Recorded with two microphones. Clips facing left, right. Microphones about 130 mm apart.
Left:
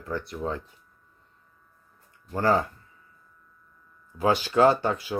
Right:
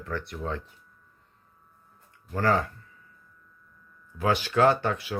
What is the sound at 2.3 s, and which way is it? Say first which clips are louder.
Speech: left 2 dB; 25° left (ahead or behind).